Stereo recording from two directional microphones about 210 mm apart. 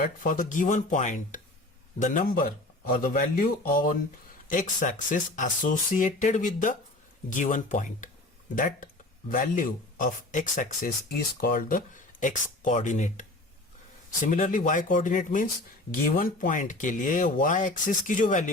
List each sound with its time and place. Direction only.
0.0 s a man's voice: 40° left (ahead or behind)
14.3 s speech: 40° left (ahead or behind)